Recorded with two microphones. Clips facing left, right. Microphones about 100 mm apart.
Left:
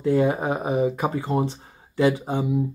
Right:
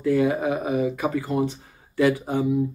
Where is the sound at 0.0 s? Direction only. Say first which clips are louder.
Even; 30° left (ahead or behind).